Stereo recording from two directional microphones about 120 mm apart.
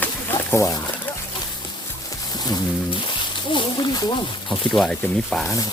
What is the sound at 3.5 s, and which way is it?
Speech, 35° left (ahead or behind).